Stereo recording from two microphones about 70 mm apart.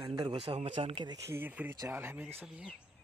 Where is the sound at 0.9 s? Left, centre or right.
Right.